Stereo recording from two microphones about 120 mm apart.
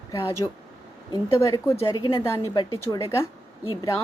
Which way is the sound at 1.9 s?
35° left (ahead or behind).